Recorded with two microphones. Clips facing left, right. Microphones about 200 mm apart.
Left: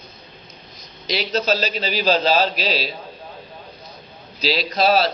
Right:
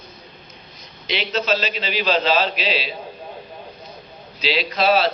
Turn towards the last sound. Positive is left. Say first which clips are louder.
# even
turn(degrees=40)  # may be behind; listen again after turning